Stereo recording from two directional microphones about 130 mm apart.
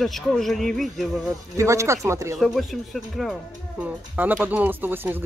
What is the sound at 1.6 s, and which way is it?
Speech, 25° right (ahead or behind).